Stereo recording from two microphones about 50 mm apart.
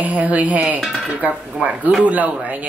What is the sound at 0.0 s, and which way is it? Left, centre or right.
Speech, right.